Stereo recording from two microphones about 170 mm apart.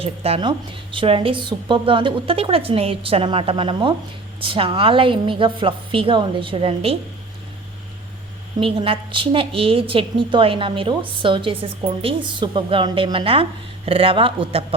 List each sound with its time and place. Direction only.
0.0 s a woman's voice: 35° right (ahead or behind)
8.6 s a woman's voice: 30° right (ahead or behind)